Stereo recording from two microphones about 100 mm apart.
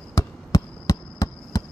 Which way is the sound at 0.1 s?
30° left (ahead or behind).